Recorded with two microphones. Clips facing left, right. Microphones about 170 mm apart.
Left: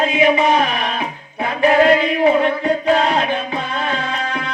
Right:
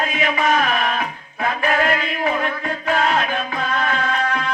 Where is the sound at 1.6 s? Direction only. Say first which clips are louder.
Left 9 dB; 25° left (ahead or behind).